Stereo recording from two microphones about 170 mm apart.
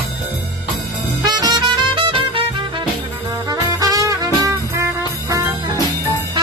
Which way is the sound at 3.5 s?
20° right (ahead or behind).